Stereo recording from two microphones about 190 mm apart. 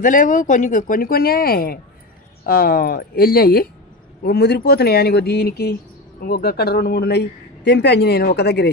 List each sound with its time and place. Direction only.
0.0 s speech: 45° left (ahead or behind); by 8.6 s 60° left (ahead or behind)